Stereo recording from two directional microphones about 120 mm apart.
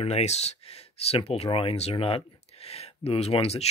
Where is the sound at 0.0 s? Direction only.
65° left (ahead or behind).